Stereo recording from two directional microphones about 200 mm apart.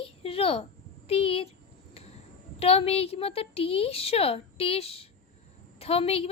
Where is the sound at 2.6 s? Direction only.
30° left (ahead or behind).